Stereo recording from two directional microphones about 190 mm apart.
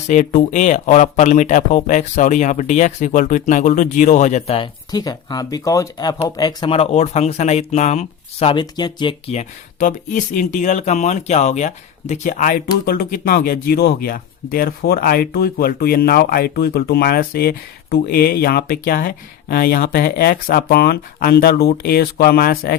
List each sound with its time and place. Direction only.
0.1 s speech: 40° left (ahead or behind)